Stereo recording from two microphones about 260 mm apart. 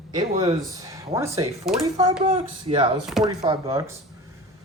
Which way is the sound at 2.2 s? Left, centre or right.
Right.